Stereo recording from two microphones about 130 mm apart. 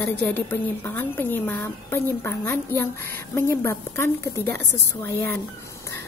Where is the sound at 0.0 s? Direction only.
10° left (ahead or behind).